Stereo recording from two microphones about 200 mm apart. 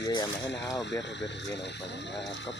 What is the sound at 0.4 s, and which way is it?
Speech, 60° left (ahead or behind).